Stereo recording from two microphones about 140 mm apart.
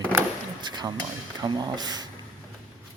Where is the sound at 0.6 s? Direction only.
30° right (ahead or behind).